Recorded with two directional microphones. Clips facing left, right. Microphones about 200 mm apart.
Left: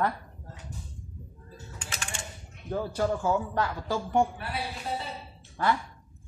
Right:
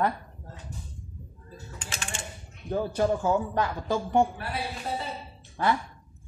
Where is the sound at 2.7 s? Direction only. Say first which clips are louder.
Right 3 dB; 20° right (ahead or behind).